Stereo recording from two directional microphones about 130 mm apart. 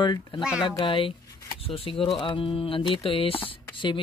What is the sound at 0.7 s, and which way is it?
Speech, 40° left (ahead or behind).